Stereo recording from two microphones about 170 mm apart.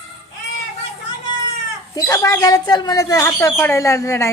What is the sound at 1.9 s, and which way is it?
Speech, 20° left (ahead or behind).